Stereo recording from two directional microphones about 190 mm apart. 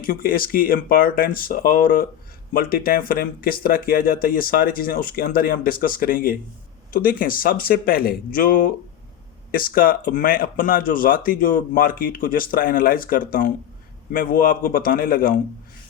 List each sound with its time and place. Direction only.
0.0 s speech: 50° left (ahead or behind)